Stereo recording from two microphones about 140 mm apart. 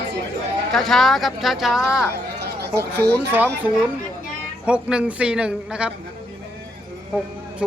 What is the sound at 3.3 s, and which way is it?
A man's voice, 15° right (ahead or behind).